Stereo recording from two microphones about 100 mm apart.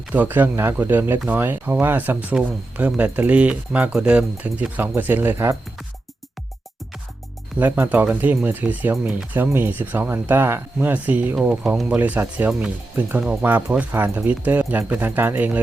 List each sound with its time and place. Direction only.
0.1 s speech: 20° right (ahead or behind)
7.6 s speech: 20° right (ahead or behind)